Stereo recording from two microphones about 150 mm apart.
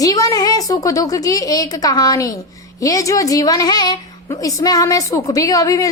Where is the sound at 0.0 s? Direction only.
25° left (ahead or behind).